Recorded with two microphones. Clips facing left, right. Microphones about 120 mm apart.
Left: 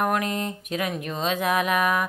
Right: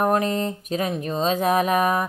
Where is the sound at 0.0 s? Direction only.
30° right (ahead or behind).